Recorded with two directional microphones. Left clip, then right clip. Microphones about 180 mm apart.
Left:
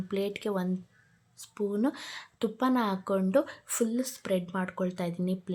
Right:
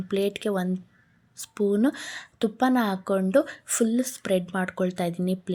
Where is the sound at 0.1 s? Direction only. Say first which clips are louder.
Right 6 dB; 20° right (ahead or behind).